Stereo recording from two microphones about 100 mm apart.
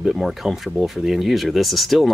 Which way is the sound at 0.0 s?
5° right (ahead or behind).